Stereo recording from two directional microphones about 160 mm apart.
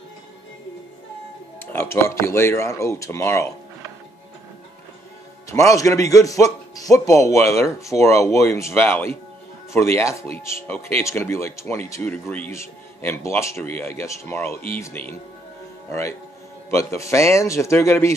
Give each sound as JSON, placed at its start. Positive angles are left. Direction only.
{"t": 1.7, "sound": "speech", "side_deg": 15}
{"t": 5.5, "sound": "a man's voice", "side_deg": 20}
{"t": 10.4, "sound": "a man's voice", "side_deg": 15}